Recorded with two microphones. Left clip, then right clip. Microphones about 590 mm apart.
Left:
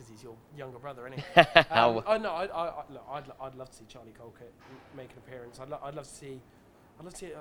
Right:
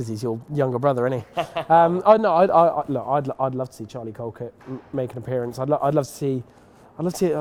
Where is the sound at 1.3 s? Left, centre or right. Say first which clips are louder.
Left 7 dB; left.